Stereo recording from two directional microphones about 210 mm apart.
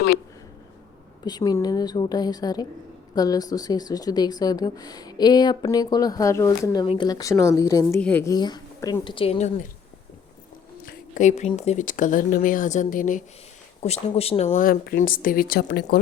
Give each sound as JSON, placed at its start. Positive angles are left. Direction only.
{"t": 1.2, "sound": "a woman's voice", "side_deg": 20}
{"t": 10.8, "sound": "speech", "side_deg": 40}